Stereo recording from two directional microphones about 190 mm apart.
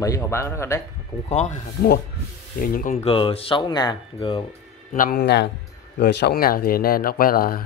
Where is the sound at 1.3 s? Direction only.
35° left (ahead or behind).